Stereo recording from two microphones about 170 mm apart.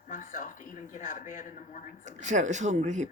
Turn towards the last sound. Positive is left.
turn(degrees=-45)  # may be behind; listen again after turning